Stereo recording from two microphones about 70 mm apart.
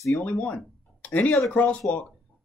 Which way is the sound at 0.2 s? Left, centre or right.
Left.